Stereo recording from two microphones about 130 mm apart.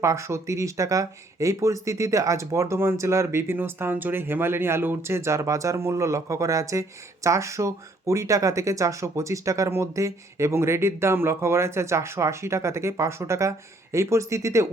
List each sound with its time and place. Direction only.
0.0 s speech: 20° right (ahead or behind)